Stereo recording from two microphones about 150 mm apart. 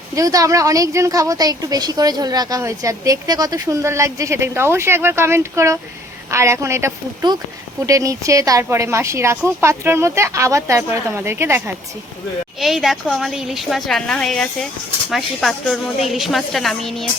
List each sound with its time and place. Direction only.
0.2 s a woman's voice: 20° right (ahead or behind)
12.5 s a woman's voice: centre (ahead or behind)